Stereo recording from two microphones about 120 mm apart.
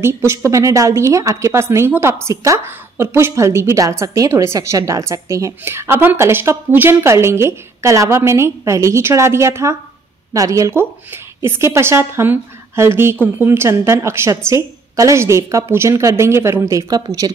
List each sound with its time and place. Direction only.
0.0 s a woman's voice: 20° right (ahead or behind)